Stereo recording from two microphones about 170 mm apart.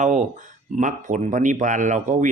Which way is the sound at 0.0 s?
45° right (ahead or behind).